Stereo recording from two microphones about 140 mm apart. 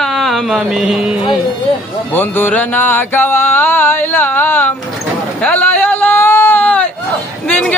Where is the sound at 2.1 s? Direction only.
15° left (ahead or behind).